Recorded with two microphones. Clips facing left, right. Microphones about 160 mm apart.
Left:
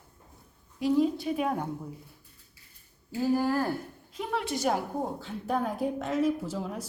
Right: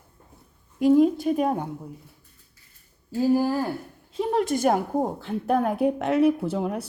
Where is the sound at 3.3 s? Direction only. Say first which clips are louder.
Right 1 dB; 15° right (ahead or behind).